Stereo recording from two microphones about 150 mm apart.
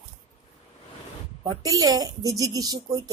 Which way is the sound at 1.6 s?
25° right (ahead or behind).